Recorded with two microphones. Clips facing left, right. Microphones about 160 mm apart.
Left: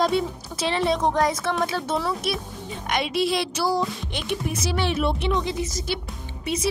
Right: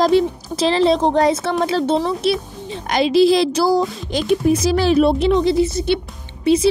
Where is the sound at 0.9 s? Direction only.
30° right (ahead or behind).